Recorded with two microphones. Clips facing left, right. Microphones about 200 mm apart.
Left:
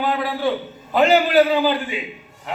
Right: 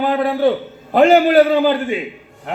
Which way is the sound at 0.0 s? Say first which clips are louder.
Right 6 dB; 55° right (ahead or behind).